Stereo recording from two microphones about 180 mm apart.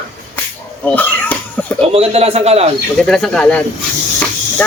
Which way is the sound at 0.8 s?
10° left (ahead or behind).